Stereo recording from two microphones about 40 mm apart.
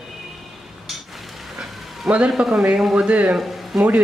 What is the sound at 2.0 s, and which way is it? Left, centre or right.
Speech, right.